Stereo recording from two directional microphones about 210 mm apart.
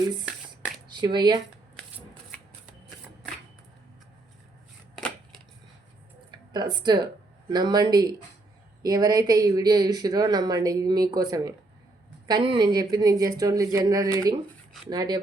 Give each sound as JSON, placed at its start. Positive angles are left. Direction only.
{"t": 0.9, "sound": "speech", "side_deg": -20}
{"t": 4.9, "sound": "chopping", "side_deg": 0}
{"t": 6.5, "sound": "speech", "side_deg": -20}